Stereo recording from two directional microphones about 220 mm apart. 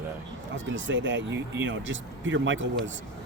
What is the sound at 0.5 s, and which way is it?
Speech, 55° right (ahead or behind).